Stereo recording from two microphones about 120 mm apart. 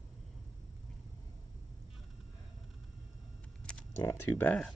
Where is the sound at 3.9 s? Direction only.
25° left (ahead or behind).